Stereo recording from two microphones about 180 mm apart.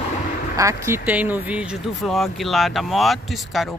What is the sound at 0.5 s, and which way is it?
Speech, 15° right (ahead or behind).